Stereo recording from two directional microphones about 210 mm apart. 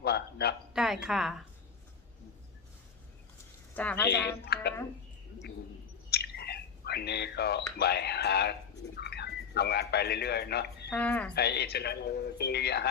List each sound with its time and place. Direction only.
0.0 s a sound: 50° left (ahead or behind)
0.7 s speech: centre (ahead or behind)
3.8 s a woman's voice: 10° left (ahead or behind)
4.4 s a man's voice: 50° left (ahead or behind)
6.1 s a sound: 50° left (ahead or behind)
7.8 s a man's voice: 50° left (ahead or behind)
10.8 s speech: 5° left (ahead or behind)
11.3 s a man's voice: 50° left (ahead or behind)